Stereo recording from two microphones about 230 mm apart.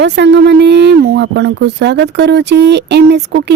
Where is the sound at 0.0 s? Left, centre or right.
Right.